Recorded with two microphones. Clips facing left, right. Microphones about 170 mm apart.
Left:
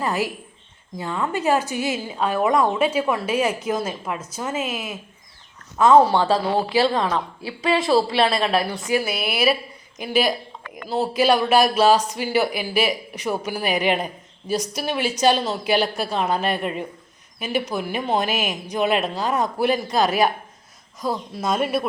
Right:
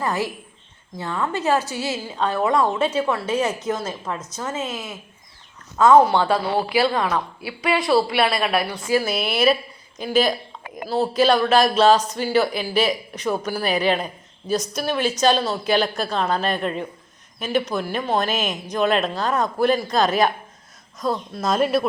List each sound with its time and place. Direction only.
0.0 s speech: 15° left (ahead or behind)
6.1 s a woman's voice: 30° left (ahead or behind); by 21.8 s 5° left (ahead or behind)